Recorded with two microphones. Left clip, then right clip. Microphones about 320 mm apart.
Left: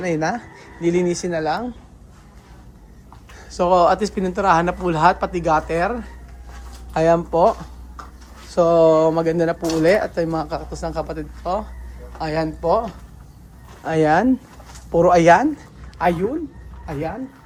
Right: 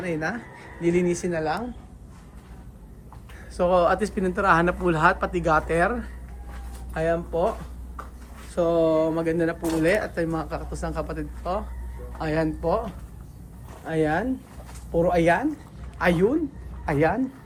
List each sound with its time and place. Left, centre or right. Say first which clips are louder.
0.0 s speech: left 7 dB; centre
3.3 s speech: left 5 dB; centre
6.9 s speech: left 8 dB; centre
8.5 s speech: left 7 dB; centre
13.8 s speech: left 8 dB; left
16.8 s speech: right 5 dB; centre